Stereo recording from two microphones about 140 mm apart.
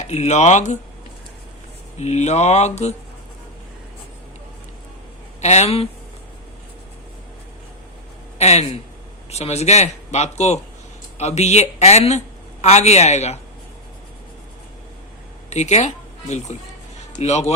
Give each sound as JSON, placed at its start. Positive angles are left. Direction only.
{"t": 0.0, "sound": "speech", "side_deg": 55}
{"t": 2.0, "sound": "speech", "side_deg": 55}
{"t": 5.4, "sound": "speech", "side_deg": 50}
{"t": 8.4, "sound": "speech", "side_deg": 50}
{"t": 15.4, "sound": "speech", "side_deg": 55}
{"t": 17.2, "sound": "speech", "side_deg": 50}